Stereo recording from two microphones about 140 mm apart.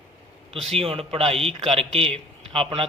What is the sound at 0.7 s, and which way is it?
A man's voice, 45° right (ahead or behind).